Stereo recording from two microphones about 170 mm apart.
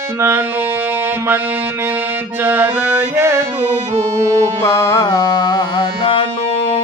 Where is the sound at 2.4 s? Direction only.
10° right (ahead or behind).